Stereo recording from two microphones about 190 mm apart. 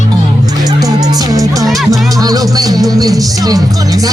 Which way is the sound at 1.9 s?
20° right (ahead or behind).